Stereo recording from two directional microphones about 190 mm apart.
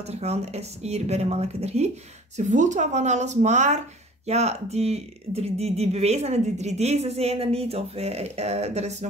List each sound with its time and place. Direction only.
0.0 s speech: 35° right (ahead or behind)